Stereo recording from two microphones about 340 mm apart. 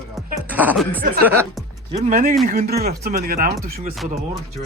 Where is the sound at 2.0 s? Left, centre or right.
Right.